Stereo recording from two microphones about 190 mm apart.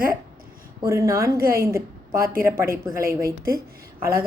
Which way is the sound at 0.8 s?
15° right (ahead or behind).